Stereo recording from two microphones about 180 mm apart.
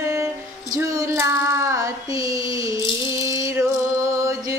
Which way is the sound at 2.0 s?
30° left (ahead or behind).